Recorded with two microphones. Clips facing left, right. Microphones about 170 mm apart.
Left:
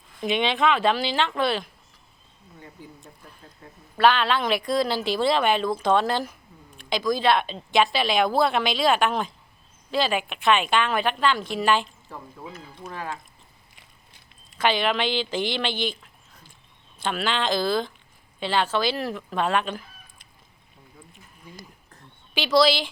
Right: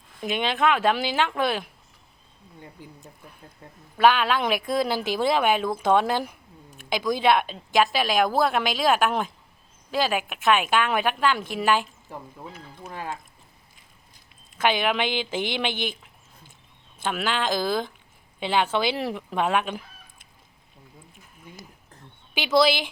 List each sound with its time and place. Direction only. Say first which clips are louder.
0.2 s speech: left 1 dB; 5° right (ahead or behind)
4.0 s speech: even; 10° right (ahead or behind)
12.9 s speech: even; 20° right (ahead or behind)
14.6 s speech: even; 10° right (ahead or behind)
17.0 s speech: even; 10° right (ahead or behind)
22.4 s speech: left 1 dB; 10° right (ahead or behind)